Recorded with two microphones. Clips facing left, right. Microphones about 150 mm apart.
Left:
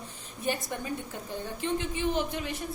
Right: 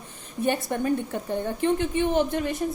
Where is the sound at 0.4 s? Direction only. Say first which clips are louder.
Right 8 dB; 60° right (ahead or behind).